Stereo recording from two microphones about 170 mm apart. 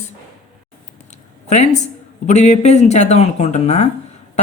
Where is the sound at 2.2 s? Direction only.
45° left (ahead or behind).